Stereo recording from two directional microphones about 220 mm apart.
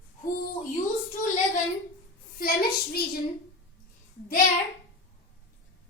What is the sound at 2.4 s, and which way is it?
Speech, 45° left (ahead or behind).